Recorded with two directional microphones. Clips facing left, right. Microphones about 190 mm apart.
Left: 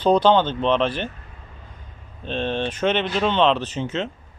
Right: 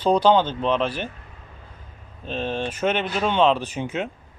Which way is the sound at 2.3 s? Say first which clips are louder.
Left 2 dB; 5° right (ahead or behind).